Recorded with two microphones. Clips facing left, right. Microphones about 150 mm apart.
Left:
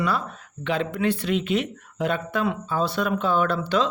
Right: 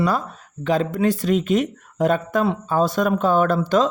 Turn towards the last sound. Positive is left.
turn(degrees=-45)  # may be behind; listen again after turning